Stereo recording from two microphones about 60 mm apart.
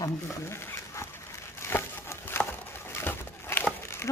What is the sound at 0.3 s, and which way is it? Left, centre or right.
Dog, left.